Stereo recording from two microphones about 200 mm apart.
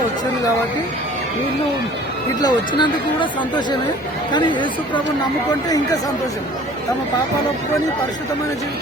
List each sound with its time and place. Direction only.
2.4 s speech: 20° left (ahead or behind)